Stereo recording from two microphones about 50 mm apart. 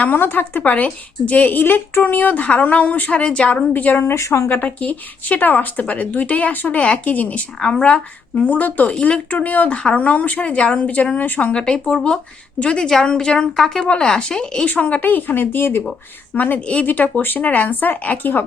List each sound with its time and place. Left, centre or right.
0.0 s a woman's voice: left
4.0 s speech: left
4.6 s a woman's voice: left
6.7 s a woman's voice: left
7.6 s a woman's voice: centre; by 8.9 s left
8.9 s a woman's voice: left
11.5 s speech: centre
14.7 s a woman's voice: left
16.3 s a woman's voice: left
16.6 s a woman's voice: left
16.8 s a woman's voice: left